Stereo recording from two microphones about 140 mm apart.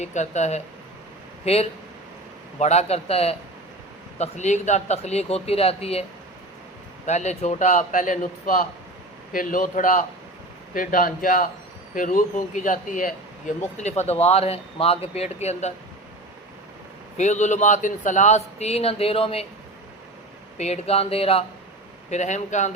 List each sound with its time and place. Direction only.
0.0 s speech: 55° left (ahead or behind)
4.2 s speech: 55° left (ahead or behind)
7.1 s speech: 55° left (ahead or behind)
10.8 s speech: 85° left
11.9 s speech: 70° left (ahead or behind)
13.7 s speech: 55° left (ahead or behind)
17.2 s speech: 55° left (ahead or behind)
20.6 s speech: 50° left (ahead or behind)
22.1 s speech: 55° left (ahead or behind)